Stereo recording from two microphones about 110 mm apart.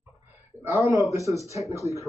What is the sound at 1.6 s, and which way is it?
Speech, 30° left (ahead or behind).